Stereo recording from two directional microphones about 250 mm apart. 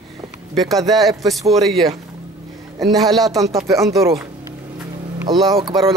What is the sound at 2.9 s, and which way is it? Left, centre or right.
Speech, centre.